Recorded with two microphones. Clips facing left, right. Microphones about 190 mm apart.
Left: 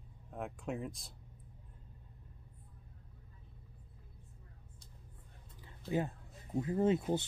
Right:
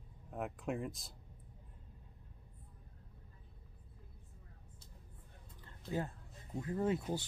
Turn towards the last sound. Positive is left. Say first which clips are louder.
# left 5 dB
turn(degrees=20)  # may be behind; listen again after turning